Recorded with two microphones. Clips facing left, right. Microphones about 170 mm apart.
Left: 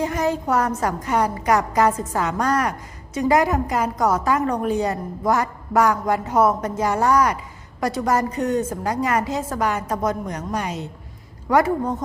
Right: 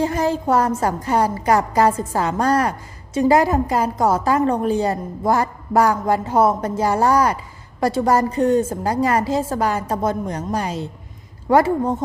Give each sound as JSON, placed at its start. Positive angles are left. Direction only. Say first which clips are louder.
{"t": 0.0, "sound": "a woman's voice", "louder": "right 2 dB", "side_deg": -30}